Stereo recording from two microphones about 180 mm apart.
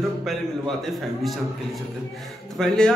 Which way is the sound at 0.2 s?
Centre (ahead or behind).